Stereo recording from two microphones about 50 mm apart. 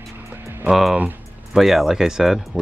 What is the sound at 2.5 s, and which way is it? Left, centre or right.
Speech, right.